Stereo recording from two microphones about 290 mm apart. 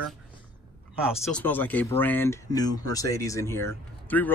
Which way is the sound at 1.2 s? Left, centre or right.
Centre.